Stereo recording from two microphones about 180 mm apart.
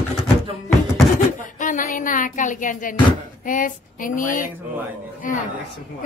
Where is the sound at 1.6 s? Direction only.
45° left (ahead or behind).